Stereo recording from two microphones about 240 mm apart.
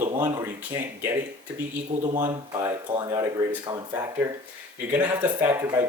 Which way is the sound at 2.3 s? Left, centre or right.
Centre.